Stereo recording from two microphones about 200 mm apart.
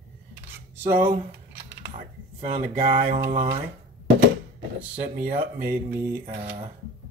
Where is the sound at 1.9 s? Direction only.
40° right (ahead or behind).